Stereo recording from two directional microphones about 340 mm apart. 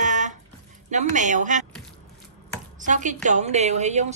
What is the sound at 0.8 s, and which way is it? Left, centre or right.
Speech, right.